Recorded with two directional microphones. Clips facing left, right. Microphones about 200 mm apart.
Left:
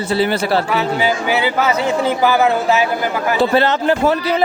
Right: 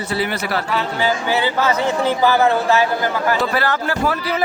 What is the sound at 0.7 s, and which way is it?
A man's voice, 10° left (ahead or behind).